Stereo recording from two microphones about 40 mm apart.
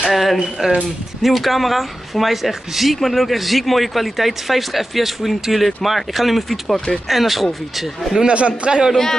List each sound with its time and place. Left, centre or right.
0.1 s speech: centre
8.2 s a man's voice: right